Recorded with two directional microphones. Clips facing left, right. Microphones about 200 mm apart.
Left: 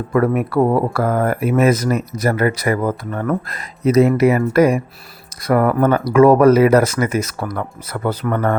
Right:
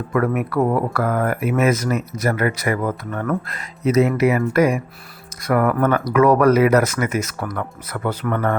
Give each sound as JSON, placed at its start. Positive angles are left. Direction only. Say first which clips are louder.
{"t": 0.1, "sound": "speech", "louder": "left 4 dB", "side_deg": 30}